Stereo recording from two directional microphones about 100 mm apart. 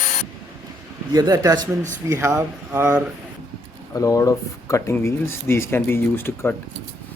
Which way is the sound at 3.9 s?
35° left (ahead or behind).